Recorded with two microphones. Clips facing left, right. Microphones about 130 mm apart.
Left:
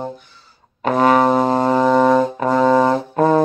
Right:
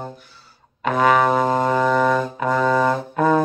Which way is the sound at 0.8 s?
35° left (ahead or behind).